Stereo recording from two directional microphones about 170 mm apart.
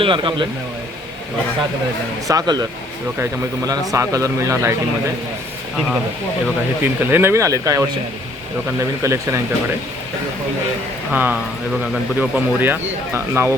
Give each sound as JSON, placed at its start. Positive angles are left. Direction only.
{"t": 0.0, "sound": "speech", "side_deg": -30}
{"t": 2.2, "sound": "a man's voice", "side_deg": -20}
{"t": 6.8, "sound": "a man's voice", "side_deg": -10}
{"t": 9.0, "sound": "a man's voice", "side_deg": -20}
{"t": 11.1, "sound": "a man's voice", "side_deg": -10}